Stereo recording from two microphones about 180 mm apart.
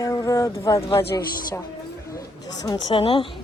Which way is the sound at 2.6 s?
20° left (ahead or behind).